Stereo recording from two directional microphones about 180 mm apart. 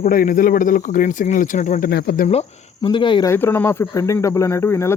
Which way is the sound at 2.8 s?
25° left (ahead or behind).